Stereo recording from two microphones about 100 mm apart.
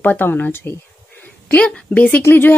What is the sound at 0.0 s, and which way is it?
A woman's voice, 20° left (ahead or behind).